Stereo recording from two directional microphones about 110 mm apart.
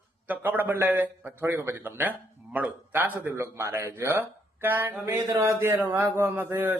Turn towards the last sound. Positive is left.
turn(degrees=-20)  # may be behind; listen again after turning